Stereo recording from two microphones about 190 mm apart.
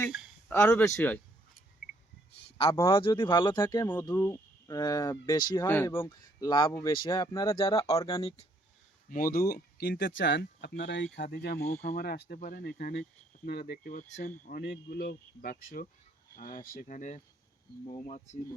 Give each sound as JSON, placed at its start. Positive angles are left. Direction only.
{"t": 0.0, "sound": "a sound", "side_deg": 5}
{"t": 0.5, "sound": "speech", "side_deg": 10}
{"t": 2.8, "sound": "speech", "side_deg": 25}
{"t": 9.0, "sound": "speech", "side_deg": 45}
{"t": 14.4, "sound": "speech", "side_deg": 50}